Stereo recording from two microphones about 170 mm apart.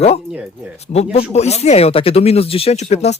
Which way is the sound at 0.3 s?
5° right (ahead or behind).